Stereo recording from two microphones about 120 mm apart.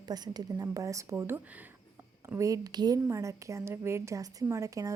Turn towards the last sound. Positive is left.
turn(degrees=-25)  # may be behind; listen again after turning